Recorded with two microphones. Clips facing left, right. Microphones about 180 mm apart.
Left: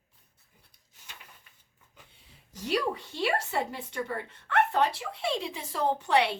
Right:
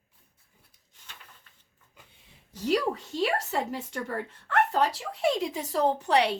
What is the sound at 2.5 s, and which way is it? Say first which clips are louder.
A woman's voice: right 3 dB; 40° right (ahead or behind).